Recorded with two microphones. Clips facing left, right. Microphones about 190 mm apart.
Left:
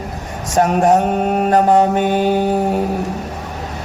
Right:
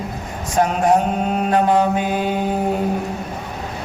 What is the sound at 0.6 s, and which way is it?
Mantra, 45° left (ahead or behind).